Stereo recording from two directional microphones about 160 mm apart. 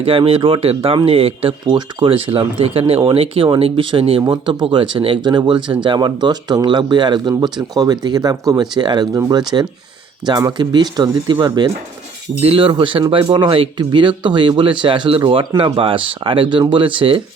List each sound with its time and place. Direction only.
0.0 s speech: 35° right (ahead or behind)